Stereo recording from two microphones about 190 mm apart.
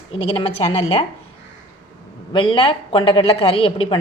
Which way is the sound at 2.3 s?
25° left (ahead or behind).